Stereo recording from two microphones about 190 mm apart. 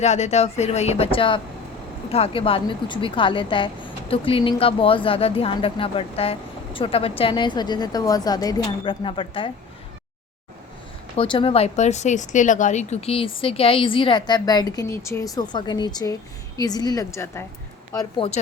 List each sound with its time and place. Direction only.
0.0 s speech: 35° left (ahead or behind)
11.2 s speech: 30° left (ahead or behind)
18.2 s speech: 30° left (ahead or behind)